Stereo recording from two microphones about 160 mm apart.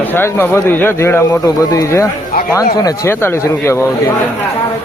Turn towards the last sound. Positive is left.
turn(degrees=15)  # may be behind; listen again after turning